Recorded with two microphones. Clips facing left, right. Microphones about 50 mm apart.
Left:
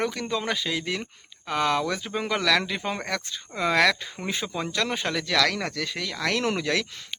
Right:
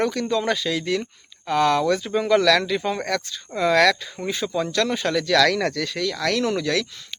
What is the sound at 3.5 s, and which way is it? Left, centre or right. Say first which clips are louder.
Speech: right 4 dB; centre.